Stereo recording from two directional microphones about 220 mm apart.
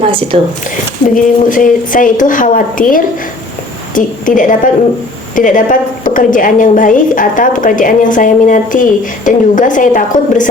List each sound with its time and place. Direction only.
0.0 s speech: 25° right (ahead or behind)
1.1 s a woman's voice: 35° left (ahead or behind)